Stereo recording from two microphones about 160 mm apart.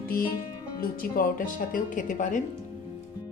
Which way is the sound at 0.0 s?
65° left (ahead or behind).